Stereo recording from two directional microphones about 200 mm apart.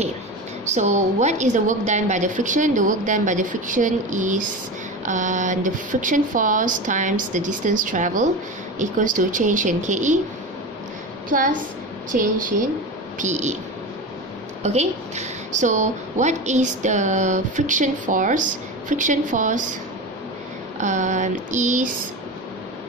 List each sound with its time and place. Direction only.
0.7 s a woman's voice: 35° right (ahead or behind)
11.2 s a woman's voice: 45° right (ahead or behind)
14.6 s a woman's voice: 35° right (ahead or behind)
20.8 s a woman's voice: 35° right (ahead or behind)